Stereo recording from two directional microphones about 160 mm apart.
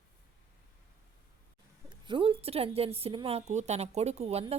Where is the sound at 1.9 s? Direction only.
30° right (ahead or behind).